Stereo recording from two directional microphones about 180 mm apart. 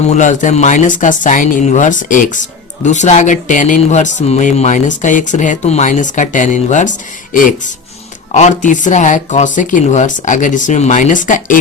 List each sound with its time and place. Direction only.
0.0 s speech: 40° left (ahead or behind)
8.3 s speech: 40° left (ahead or behind)